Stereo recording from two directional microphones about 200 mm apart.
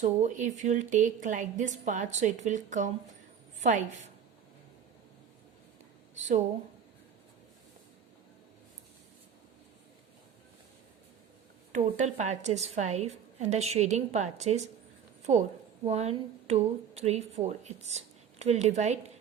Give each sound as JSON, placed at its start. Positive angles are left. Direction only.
{"t": 0.0, "sound": "a woman's voice", "side_deg": -40}
{"t": 11.7, "sound": "a woman's voice", "side_deg": -35}